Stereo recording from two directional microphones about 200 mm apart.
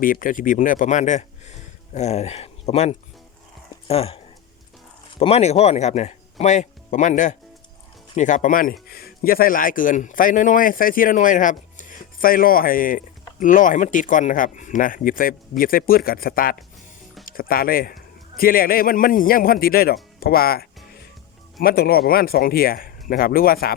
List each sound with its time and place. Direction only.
0.0 s speech: 45° left (ahead or behind)
5.2 s a man's voice: 30° left (ahead or behind); by 23.7 s 45° left (ahead or behind)